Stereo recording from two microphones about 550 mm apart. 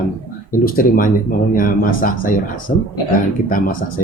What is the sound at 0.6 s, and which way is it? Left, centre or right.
Speech, centre.